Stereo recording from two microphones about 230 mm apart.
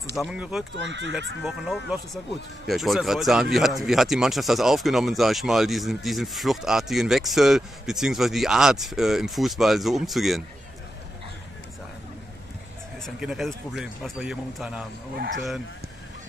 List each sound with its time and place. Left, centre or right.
0.2 s speech: centre
0.7 s speech: right
1.4 s speech: centre
13.0 s speech: centre